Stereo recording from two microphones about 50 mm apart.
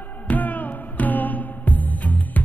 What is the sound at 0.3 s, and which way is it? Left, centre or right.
Music, left.